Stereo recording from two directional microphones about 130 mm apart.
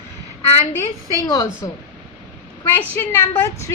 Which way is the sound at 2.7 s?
15° left (ahead or behind).